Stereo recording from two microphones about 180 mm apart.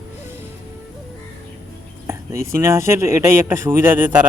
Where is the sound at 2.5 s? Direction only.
15° right (ahead or behind).